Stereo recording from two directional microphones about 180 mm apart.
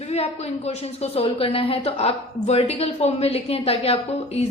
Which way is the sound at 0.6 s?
35° left (ahead or behind).